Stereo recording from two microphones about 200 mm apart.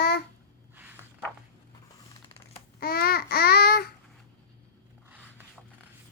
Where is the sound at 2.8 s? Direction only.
50° left (ahead or behind).